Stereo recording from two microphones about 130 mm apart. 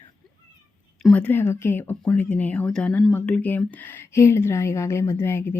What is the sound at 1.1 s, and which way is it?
Speech, 15° left (ahead or behind).